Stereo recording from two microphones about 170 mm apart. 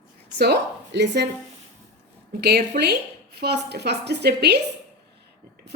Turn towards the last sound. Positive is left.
turn(degrees=-75)  # may be behind; listen again after turning